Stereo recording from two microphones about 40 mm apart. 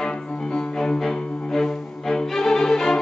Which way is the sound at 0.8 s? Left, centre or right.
Centre.